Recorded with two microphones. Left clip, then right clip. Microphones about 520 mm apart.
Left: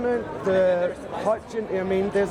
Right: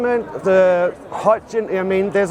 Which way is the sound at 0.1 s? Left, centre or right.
Right.